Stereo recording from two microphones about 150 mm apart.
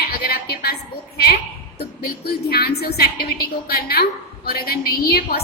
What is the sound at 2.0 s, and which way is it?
A woman's voice, 90° left.